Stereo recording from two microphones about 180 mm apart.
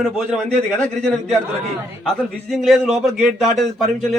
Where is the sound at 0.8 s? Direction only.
5° left (ahead or behind).